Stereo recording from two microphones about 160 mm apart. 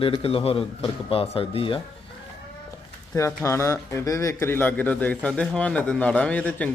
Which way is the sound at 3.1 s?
15° left (ahead or behind).